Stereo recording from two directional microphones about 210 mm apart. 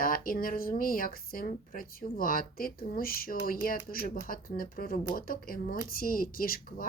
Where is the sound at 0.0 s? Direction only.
40° left (ahead or behind).